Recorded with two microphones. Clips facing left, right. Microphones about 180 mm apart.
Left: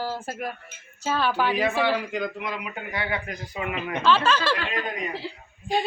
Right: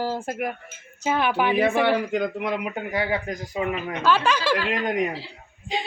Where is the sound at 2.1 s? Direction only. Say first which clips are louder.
Right 5 dB; 55° right (ahead or behind).